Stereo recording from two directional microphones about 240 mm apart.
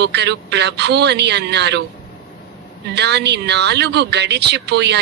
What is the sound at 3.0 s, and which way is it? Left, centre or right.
Speech, right.